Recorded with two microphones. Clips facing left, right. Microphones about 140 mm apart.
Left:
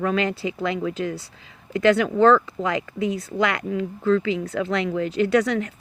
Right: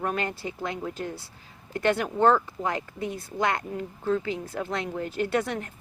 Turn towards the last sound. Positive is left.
turn(degrees=90)